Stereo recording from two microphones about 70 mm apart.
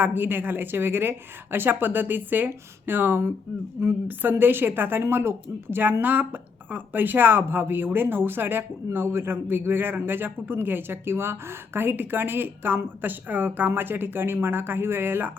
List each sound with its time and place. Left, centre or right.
0.0 s a woman's voice: right